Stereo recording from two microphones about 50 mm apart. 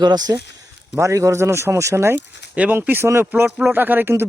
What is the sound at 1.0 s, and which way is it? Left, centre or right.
Speech, right.